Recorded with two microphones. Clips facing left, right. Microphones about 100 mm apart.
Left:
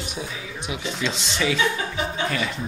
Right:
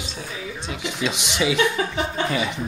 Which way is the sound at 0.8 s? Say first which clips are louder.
Right 2 dB; 15° right (ahead or behind).